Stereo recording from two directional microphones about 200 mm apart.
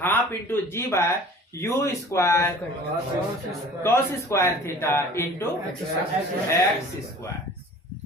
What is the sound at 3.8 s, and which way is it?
Speech, 15° left (ahead or behind).